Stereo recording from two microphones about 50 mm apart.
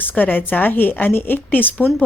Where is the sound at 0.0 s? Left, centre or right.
Left.